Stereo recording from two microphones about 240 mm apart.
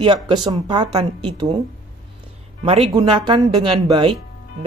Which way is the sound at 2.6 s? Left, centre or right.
Right.